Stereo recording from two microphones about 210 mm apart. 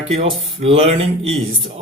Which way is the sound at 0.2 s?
30° right (ahead or behind).